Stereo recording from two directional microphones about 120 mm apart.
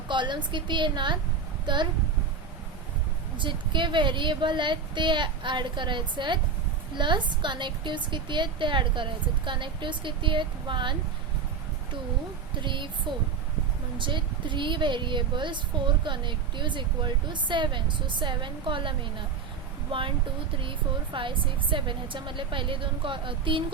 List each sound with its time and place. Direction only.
0.1 s a woman's voice: 40° right (ahead or behind)
3.3 s a woman's voice: 40° right (ahead or behind)
12.6 s speech: 40° right (ahead or behind)
14.0 s a woman's voice: 40° right (ahead or behind)